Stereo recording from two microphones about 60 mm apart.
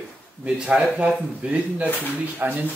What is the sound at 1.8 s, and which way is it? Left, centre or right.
Speech, left.